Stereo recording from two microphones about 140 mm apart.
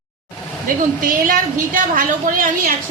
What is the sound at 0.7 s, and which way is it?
A woman's voice, 80° right.